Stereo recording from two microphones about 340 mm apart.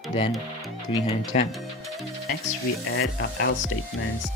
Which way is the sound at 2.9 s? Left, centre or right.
Left.